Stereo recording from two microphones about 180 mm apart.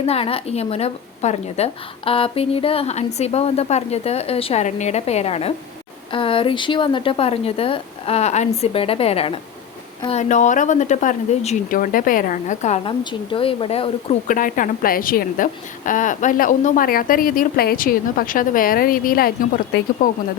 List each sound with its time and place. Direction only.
0.0 s a woman's voice: 35° left (ahead or behind)
14.3 s a woman's voice: 50° left (ahead or behind)